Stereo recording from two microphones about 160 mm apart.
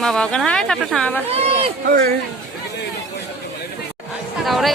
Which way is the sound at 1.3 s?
40° right (ahead or behind).